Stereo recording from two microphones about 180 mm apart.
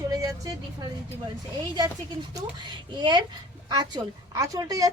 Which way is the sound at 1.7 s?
25° right (ahead or behind).